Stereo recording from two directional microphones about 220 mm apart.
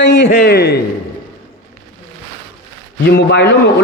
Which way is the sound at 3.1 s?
50° left (ahead or behind).